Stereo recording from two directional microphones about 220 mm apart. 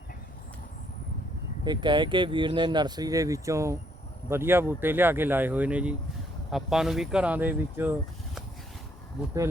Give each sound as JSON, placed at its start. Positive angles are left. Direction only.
{"t": 1.6, "sound": "speech", "side_deg": -20}